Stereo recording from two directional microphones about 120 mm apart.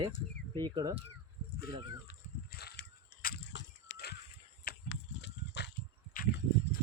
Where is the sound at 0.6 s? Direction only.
35° right (ahead or behind).